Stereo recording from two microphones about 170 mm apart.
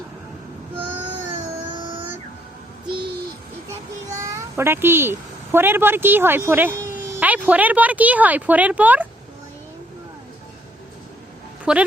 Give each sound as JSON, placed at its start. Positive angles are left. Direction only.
{"t": 1.8, "sound": "vehicle", "side_deg": -30}
{"t": 4.2, "sound": "a child's voice", "side_deg": -20}
{"t": 11.6, "sound": "speech", "side_deg": -5}